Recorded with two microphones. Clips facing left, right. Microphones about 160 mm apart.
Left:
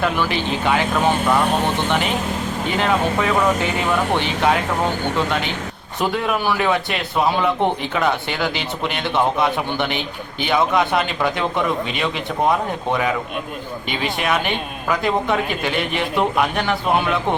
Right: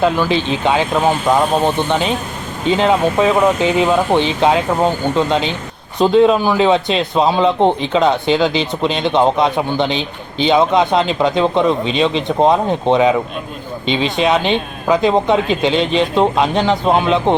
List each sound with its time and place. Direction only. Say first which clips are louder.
0.0 s a man's voice: right 5 dB; 20° right (ahead or behind)